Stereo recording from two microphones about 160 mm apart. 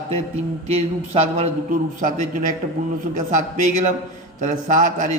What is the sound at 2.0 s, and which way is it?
A man's voice, 55° right (ahead or behind).